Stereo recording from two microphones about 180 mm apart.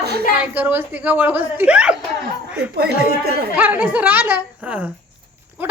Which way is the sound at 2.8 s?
60° right (ahead or behind).